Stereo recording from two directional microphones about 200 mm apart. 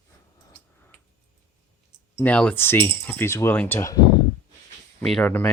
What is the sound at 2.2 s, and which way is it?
Speech, 5° left (ahead or behind).